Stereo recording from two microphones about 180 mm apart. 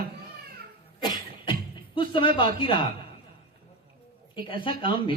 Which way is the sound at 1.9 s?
30° left (ahead or behind).